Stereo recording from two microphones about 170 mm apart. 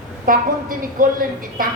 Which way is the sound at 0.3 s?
55° right (ahead or behind).